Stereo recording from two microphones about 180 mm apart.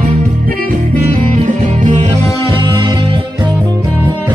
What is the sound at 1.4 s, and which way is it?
Music, 40° right (ahead or behind).